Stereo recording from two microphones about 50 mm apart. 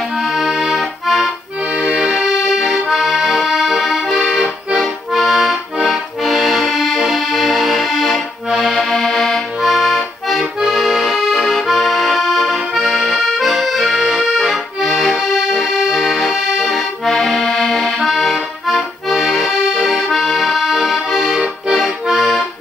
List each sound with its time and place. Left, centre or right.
0.2 s accordion: centre
1.7 s accordion: right
2.1 s accordion: centre
4.2 s accordion: right
4.7 s accordion: centre